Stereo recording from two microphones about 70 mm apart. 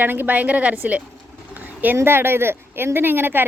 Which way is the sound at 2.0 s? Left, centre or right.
Right.